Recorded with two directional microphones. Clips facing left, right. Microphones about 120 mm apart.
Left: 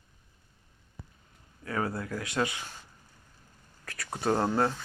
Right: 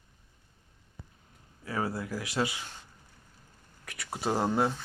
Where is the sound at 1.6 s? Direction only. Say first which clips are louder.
Left 1 dB; 10° right (ahead or behind).